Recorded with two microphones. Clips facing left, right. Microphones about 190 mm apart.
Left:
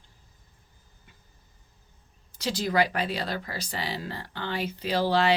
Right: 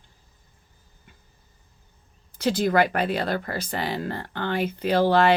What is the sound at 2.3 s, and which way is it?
Speech, 55° right (ahead or behind).